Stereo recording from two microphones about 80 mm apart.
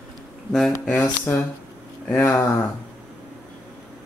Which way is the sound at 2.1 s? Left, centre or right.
Left.